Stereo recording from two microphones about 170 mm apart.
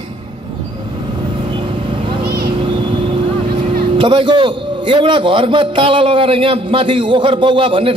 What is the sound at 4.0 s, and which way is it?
A man's voice, 30° right (ahead or behind).